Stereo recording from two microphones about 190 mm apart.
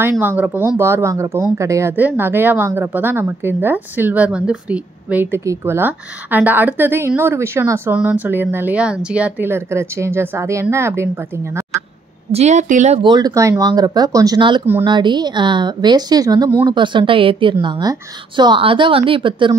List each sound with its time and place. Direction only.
0.0 s speech: 10° right (ahead or behind)
12.3 s speech: 35° right (ahead or behind)
13.0 s a woman's voice: 20° right (ahead or behind)